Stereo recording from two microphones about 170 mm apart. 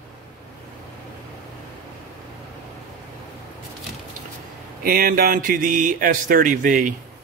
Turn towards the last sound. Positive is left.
turn(degrees=-50)  # may be behind; listen again after turning